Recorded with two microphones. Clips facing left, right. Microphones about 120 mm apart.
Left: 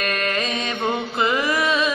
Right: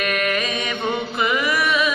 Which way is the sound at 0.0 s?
30° left (ahead or behind).